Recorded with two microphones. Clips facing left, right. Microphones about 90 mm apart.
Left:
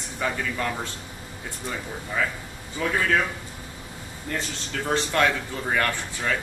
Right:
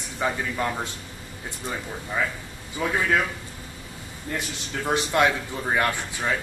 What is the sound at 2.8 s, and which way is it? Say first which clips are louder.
Speech: even; 15° right (ahead or behind).